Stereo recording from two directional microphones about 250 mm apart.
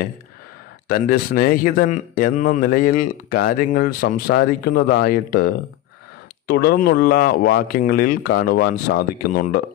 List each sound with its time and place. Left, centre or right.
0.8 s speech: left